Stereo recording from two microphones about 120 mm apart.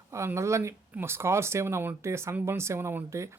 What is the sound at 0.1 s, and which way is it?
A woman's voice, 25° right (ahead or behind).